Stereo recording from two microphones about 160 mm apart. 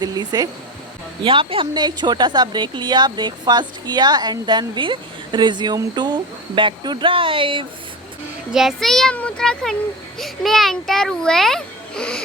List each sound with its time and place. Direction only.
0.0 s a woman's voice: 25° right (ahead or behind)
8.5 s a child's voice: centre (ahead or behind)